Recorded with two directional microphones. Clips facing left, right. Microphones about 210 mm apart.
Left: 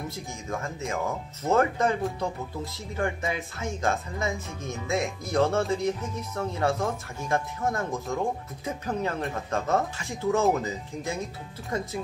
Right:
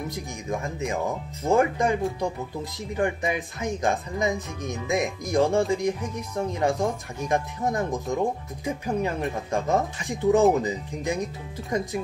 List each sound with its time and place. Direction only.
0.1 s speech: 15° right (ahead or behind)